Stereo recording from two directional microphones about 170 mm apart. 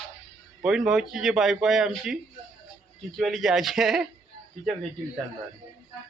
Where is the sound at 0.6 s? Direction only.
5° right (ahead or behind).